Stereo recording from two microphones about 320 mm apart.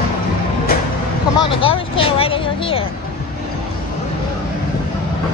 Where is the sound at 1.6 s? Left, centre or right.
Centre.